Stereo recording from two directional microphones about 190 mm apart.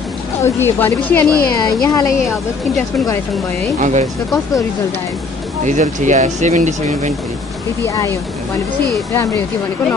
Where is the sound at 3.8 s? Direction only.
35° right (ahead or behind).